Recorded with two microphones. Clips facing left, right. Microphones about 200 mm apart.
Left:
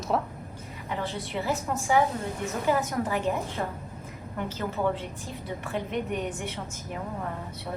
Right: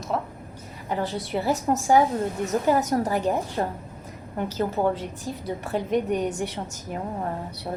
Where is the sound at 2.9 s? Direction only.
35° right (ahead or behind).